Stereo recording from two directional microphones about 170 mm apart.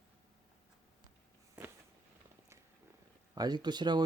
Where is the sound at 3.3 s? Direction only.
25° right (ahead or behind).